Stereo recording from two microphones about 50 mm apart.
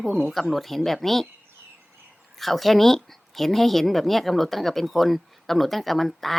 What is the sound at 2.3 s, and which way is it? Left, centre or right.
Speech, centre.